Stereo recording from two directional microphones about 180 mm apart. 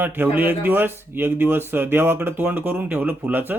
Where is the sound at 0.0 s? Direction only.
10° right (ahead or behind).